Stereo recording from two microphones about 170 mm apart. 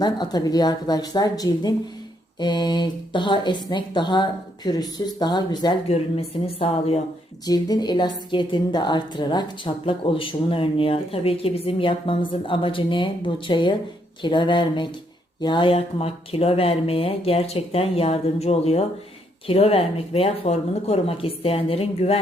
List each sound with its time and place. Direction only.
0.0 s a woman's voice: 25° left (ahead or behind)
7.4 s a woman's voice: 25° left (ahead or behind)